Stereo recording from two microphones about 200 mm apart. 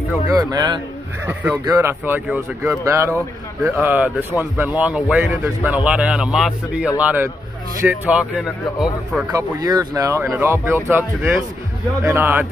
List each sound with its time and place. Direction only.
0.3 s speech: 20° right (ahead or behind)
9.3 s speech: 20° right (ahead or behind)